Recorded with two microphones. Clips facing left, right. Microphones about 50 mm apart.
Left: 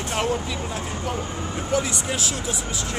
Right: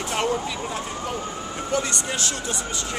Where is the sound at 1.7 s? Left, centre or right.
Centre.